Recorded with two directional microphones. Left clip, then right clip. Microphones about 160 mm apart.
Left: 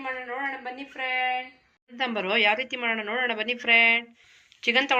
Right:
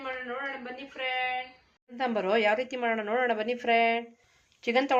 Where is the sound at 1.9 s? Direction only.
20° right (ahead or behind).